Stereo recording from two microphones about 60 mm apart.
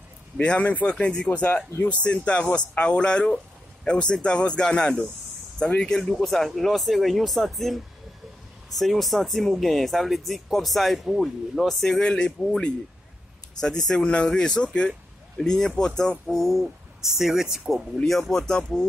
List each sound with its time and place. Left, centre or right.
0.4 s speech: left; by 12.0 s centre
12.0 s speech: centre
16.3 s speech: centre